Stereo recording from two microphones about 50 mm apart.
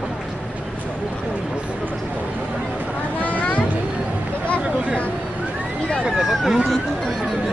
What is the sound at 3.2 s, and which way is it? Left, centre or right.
Vehicle, left.